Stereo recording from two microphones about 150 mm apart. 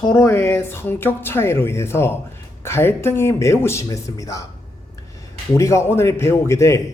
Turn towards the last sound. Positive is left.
turn(degrees=20)  # may be behind; listen again after turning